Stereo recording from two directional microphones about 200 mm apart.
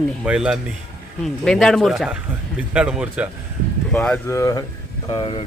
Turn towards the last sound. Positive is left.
turn(degrees=20)  # may be behind; listen again after turning